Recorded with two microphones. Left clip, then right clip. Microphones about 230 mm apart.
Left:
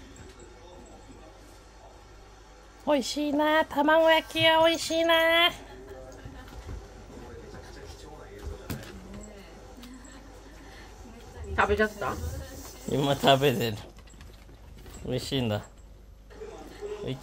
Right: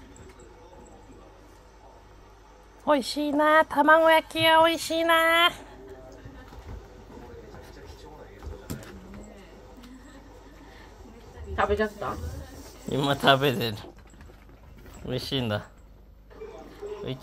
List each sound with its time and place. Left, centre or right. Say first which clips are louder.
2.8 s speech: right 2 dB; centre
11.5 s a sound: even; centre
12.9 s speech: right 1 dB; centre
15.0 s speech: right 1 dB; centre